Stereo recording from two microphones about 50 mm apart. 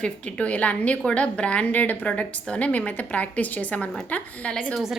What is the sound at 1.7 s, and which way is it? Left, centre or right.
Speech, left.